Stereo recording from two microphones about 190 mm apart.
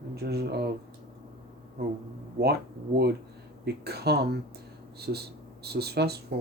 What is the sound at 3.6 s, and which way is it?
Speech, 60° right (ahead or behind).